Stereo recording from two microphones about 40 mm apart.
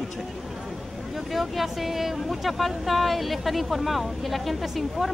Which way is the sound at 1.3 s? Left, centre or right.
Centre.